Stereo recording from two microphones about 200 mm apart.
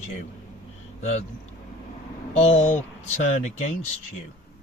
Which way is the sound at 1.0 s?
35° left (ahead or behind).